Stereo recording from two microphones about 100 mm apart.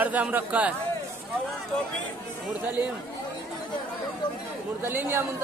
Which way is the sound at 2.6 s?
20° right (ahead or behind).